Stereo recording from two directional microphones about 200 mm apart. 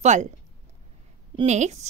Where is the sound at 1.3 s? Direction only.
35° right (ahead or behind).